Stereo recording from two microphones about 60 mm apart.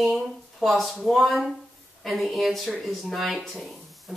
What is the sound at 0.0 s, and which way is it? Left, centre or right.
A woman's voice, centre.